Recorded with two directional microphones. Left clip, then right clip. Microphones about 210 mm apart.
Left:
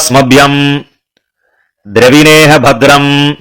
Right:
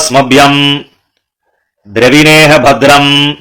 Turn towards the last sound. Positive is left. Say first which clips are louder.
# right 1 dB
turn(degrees=25)  # may be behind; listen again after turning